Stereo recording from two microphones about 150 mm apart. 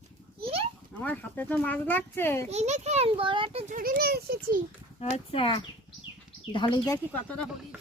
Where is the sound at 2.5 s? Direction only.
50° right (ahead or behind).